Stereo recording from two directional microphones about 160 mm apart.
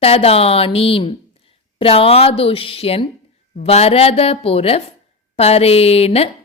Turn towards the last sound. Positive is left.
turn(degrees=40)  # may be behind; listen again after turning